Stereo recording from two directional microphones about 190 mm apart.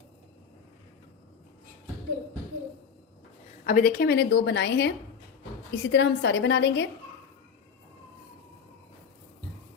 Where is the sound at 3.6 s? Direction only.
45° left (ahead or behind); by 6.8 s 65° left (ahead or behind).